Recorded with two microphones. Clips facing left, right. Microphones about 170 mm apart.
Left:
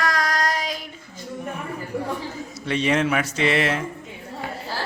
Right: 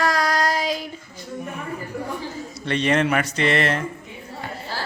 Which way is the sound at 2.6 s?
5° left (ahead or behind).